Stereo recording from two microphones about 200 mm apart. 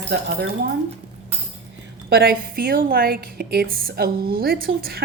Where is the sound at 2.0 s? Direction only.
50° right (ahead or behind).